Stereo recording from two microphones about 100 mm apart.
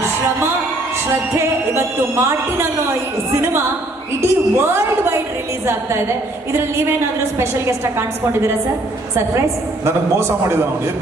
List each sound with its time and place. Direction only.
1.1 s speech: 25° right (ahead or behind)
7.3 s speech: 25° right (ahead or behind)
9.8 s speech: 25° right (ahead or behind)